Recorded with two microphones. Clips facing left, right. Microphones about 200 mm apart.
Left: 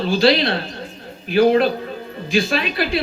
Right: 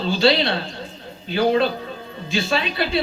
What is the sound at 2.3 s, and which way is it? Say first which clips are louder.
Speech: left 3 dB; 25° right (ahead or behind).